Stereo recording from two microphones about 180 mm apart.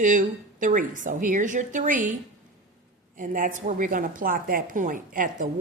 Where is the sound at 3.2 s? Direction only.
45° right (ahead or behind).